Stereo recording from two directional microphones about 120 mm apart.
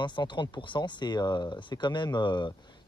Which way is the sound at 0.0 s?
40° left (ahead or behind).